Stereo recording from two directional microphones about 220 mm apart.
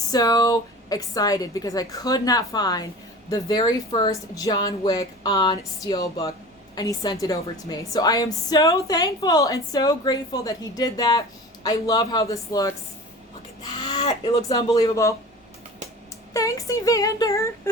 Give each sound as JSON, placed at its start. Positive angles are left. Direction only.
{"t": 0.1, "sound": "a woman's voice", "side_deg": 15}
{"t": 16.3, "sound": "a woman's voice", "side_deg": 15}